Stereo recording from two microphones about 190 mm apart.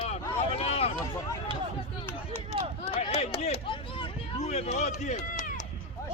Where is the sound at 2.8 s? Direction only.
35° left (ahead or behind).